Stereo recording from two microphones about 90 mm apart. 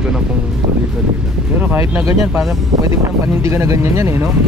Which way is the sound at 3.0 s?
35° right (ahead or behind).